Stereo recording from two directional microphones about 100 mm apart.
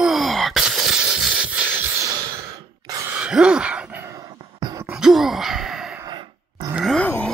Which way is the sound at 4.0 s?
30° right (ahead or behind).